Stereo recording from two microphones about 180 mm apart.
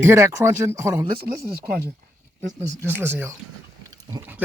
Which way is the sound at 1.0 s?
55° right (ahead or behind).